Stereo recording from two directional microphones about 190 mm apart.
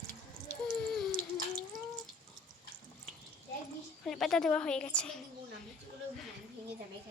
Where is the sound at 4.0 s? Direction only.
Centre (ahead or behind).